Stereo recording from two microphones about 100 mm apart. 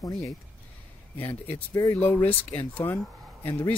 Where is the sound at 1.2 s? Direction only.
20° left (ahead or behind).